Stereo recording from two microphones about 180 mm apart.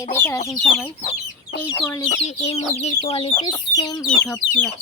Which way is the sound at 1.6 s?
15° left (ahead or behind).